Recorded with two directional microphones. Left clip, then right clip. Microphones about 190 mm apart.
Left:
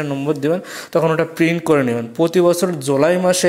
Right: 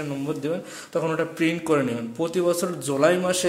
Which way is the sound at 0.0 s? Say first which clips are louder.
Left 9 dB; 30° left (ahead or behind).